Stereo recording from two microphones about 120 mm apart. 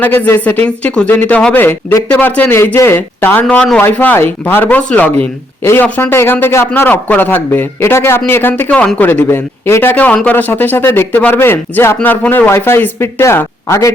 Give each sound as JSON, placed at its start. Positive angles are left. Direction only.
{"t": 0.0, "sound": "a man's voice", "side_deg": 15}